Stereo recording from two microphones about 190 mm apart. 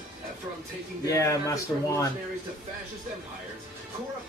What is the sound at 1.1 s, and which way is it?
Speech, 15° left (ahead or behind).